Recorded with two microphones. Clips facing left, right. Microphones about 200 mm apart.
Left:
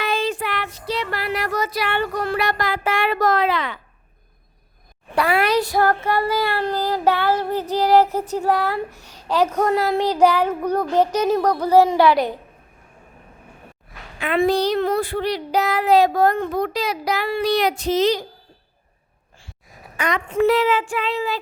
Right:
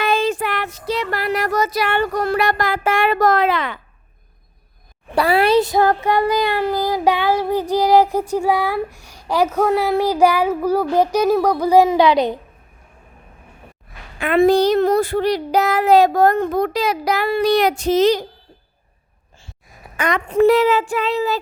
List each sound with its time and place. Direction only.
0.0 s a sound: 50° right (ahead or behind)
5.1 s a child's voice: 35° right (ahead or behind); by 6.7 s 15° right (ahead or behind)
6.7 s child singing: 10° right (ahead or behind)
14.2 s a child's voice: 50° right (ahead or behind)
20.0 s a child's voice: 50° right (ahead or behind)
20.3 s speech: 40° right (ahead or behind)